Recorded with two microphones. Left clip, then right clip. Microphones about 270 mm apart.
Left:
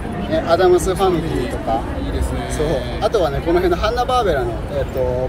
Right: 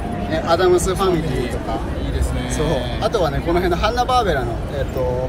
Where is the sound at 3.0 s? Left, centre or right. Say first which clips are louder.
Left 2 dB; centre.